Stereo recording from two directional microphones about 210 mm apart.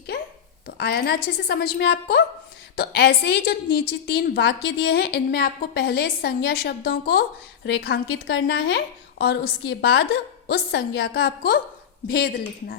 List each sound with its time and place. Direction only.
0.8 s a woman's voice: 50° left (ahead or behind)